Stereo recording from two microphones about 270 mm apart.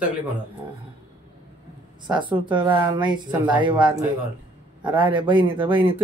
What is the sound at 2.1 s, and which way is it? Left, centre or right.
Speech, centre.